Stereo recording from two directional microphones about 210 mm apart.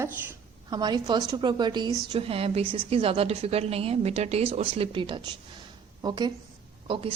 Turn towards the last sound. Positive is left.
turn(degrees=-25)  # may be behind; listen again after turning